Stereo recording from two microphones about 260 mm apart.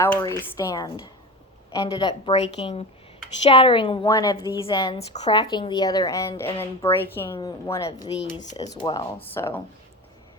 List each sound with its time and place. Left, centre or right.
0.0 s a woman's voice: centre
8.4 s a woman's voice: left
8.7 s a woman's voice: centre